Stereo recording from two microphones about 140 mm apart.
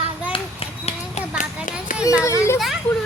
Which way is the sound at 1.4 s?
70° left (ahead or behind).